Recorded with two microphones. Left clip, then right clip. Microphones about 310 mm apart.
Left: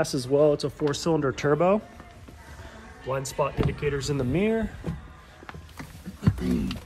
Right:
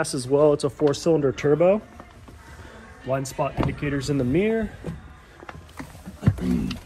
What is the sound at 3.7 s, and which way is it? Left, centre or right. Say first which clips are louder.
Speech: right 1 dB; centre.